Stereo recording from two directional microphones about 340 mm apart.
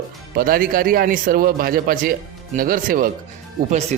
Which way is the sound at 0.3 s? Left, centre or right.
Right.